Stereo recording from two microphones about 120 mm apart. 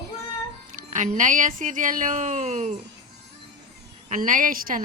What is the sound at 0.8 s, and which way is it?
Speech, 90° right.